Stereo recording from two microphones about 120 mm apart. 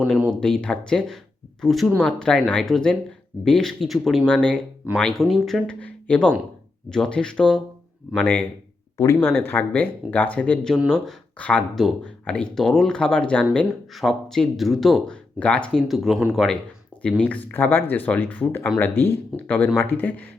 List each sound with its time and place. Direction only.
0.3 s speech: 5° left (ahead or behind)